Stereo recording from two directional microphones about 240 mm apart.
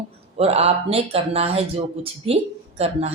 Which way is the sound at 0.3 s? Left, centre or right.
Right.